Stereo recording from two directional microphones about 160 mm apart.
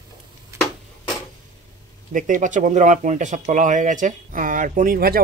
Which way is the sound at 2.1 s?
50° right (ahead or behind).